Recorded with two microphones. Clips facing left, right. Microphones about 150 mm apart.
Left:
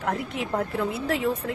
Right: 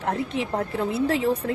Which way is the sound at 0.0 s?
30° right (ahead or behind).